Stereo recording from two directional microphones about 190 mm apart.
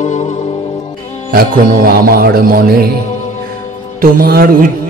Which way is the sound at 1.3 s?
50° right (ahead or behind).